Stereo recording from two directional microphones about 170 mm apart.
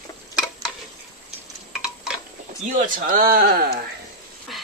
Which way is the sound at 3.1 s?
60° right (ahead or behind).